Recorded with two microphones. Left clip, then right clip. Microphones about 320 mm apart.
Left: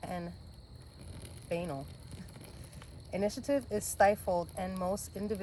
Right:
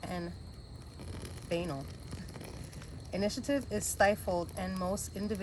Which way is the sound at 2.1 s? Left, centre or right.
Centre.